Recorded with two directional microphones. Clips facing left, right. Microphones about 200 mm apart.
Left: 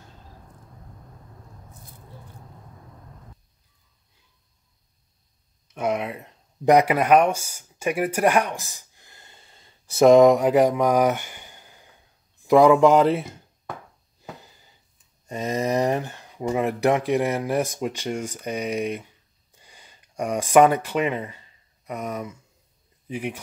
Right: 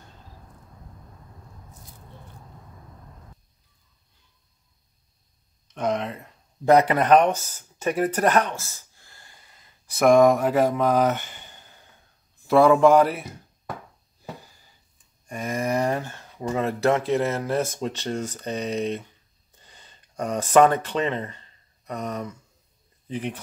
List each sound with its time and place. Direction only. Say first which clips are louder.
5.8 s speech: left 1 dB; 10° left (ahead or behind); by 13.3 s 25° left (ahead or behind)
15.2 s speech: left 2 dB; 25° left (ahead or behind)
19.5 s a sound: left 1 dB; 10° left (ahead or behind)
23.0 s speech: even; 10° left (ahead or behind)